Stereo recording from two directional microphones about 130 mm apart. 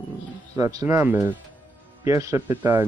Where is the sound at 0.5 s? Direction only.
30° right (ahead or behind).